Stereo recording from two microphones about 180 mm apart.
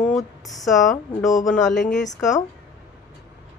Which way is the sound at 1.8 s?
40° left (ahead or behind).